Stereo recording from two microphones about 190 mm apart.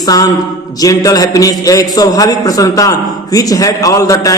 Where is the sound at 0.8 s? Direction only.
20° left (ahead or behind).